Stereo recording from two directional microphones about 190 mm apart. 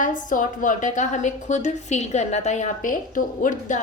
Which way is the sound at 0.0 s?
45° left (ahead or behind).